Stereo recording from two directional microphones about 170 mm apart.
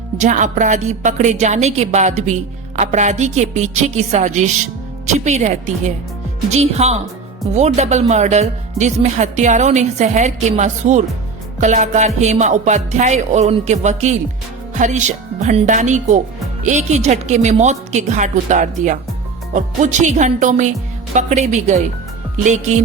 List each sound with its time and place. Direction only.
0.2 s a woman's voice: 45° right (ahead or behind)